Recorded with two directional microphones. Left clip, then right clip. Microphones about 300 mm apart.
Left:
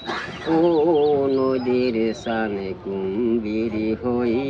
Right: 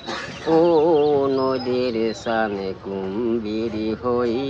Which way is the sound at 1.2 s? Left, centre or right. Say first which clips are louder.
Even; centre.